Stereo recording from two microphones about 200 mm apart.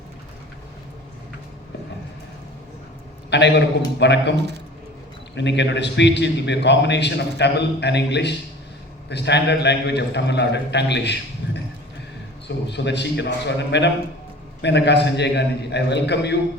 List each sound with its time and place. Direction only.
3.2 s a man's voice: 60° left (ahead or behind)